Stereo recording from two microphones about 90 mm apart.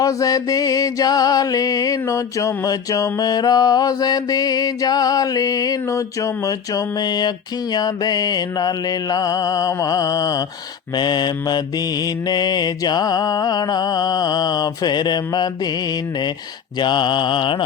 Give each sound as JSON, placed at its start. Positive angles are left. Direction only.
{"t": 0.0, "sound": "mantra", "side_deg": 40}
{"t": 10.9, "sound": "mantra", "side_deg": 55}
{"t": 16.8, "sound": "mantra", "side_deg": 55}